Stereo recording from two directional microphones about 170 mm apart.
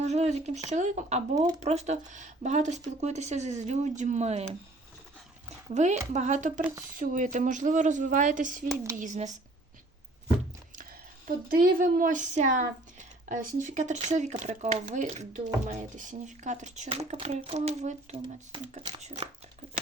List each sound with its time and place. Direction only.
0.0 s speech: 40° right (ahead or behind)
5.7 s speech: 40° right (ahead or behind)
11.3 s speech: 55° right (ahead or behind); by 19.3 s 40° right (ahead or behind)